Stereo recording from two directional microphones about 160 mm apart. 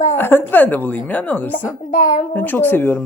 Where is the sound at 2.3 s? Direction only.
10° left (ahead or behind).